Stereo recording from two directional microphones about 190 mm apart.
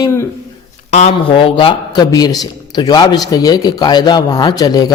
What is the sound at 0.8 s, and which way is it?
A man's voice, 35° left (ahead or behind).